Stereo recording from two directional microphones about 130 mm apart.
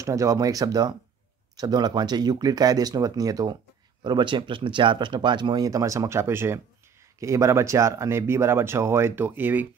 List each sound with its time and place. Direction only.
0.0 s speech: 25° right (ahead or behind)